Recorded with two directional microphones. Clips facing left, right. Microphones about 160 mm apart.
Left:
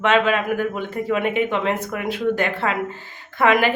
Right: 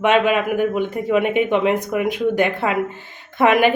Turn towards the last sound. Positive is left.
turn(degrees=-20)  # may be behind; listen again after turning